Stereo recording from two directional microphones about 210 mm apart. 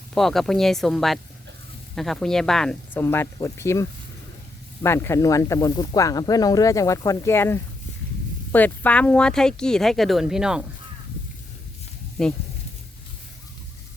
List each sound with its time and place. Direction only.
0.1 s speech: centre (ahead or behind)
12.2 s speech: 5° left (ahead or behind)